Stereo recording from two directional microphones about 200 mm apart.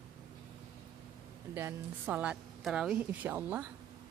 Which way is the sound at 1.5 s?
10° right (ahead or behind).